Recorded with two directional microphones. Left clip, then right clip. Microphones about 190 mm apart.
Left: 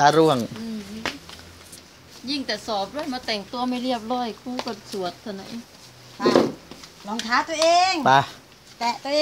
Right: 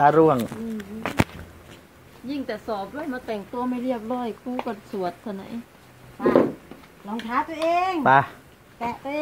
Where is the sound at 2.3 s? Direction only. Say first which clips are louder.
Left 2 dB; 30° left (ahead or behind); by 4.7 s 15° left (ahead or behind).